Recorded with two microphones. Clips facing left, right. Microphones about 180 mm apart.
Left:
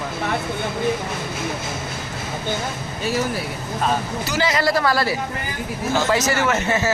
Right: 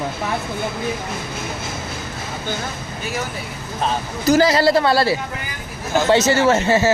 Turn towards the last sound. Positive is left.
turn(degrees=-30)  # may be behind; listen again after turning